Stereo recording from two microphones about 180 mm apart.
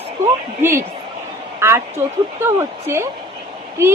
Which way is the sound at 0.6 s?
15° right (ahead or behind).